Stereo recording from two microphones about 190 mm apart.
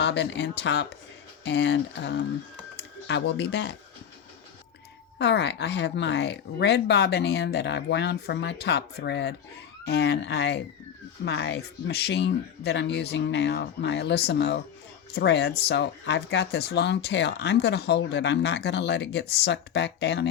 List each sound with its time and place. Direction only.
0.0 s speech: 65° left (ahead or behind)
5.1 s speech: 65° left (ahead or behind)